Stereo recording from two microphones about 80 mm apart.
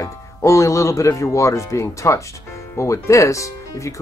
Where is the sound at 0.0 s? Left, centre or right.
Left.